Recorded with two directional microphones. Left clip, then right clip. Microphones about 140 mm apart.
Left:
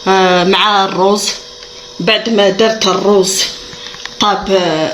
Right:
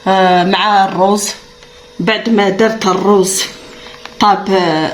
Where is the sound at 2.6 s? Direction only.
55° right (ahead or behind).